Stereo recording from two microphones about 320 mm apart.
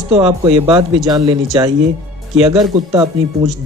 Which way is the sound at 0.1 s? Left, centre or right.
Centre.